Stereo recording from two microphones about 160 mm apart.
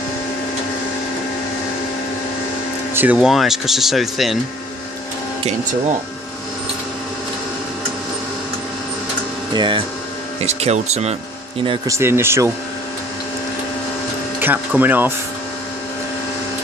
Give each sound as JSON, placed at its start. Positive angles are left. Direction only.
{"t": 2.9, "sound": "speech", "side_deg": -10}
{"t": 9.5, "sound": "speech", "side_deg": -30}
{"t": 10.4, "sound": "speech", "side_deg": -45}
{"t": 11.6, "sound": "speech", "side_deg": -35}
{"t": 11.9, "sound": "speech", "side_deg": -15}
{"t": 14.4, "sound": "speech", "side_deg": -10}